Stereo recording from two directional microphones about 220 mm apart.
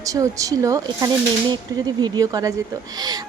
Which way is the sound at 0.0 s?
15° right (ahead or behind).